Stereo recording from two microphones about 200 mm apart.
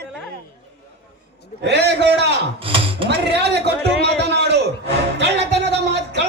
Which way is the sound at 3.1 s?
55° right (ahead or behind).